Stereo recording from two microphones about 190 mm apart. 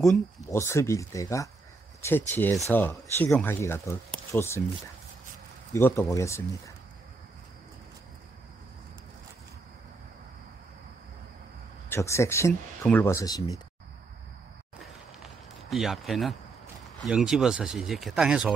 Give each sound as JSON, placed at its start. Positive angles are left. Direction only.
{"t": 0.5, "sound": "speech", "side_deg": 15}
{"t": 5.7, "sound": "speech", "side_deg": 10}
{"t": 11.9, "sound": "speech", "side_deg": 15}
{"t": 15.7, "sound": "speech", "side_deg": 0}